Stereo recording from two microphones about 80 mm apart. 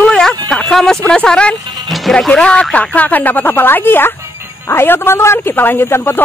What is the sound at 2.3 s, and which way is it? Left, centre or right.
A man's voice, centre.